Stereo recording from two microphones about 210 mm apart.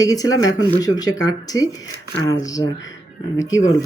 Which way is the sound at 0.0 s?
15° left (ahead or behind).